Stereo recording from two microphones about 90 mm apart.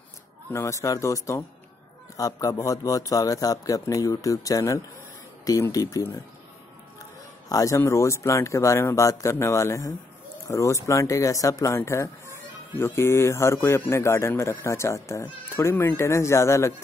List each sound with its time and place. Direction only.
0.5 s speech: 35° left (ahead or behind)